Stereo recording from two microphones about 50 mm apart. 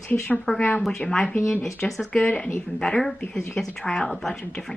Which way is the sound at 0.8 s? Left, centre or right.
Centre.